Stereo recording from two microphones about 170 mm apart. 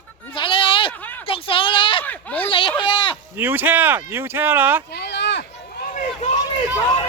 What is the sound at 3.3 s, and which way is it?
Speech, 10° right (ahead or behind).